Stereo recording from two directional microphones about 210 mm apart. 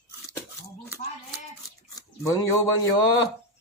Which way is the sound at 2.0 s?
15° left (ahead or behind).